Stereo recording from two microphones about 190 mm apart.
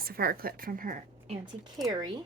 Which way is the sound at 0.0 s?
50° right (ahead or behind).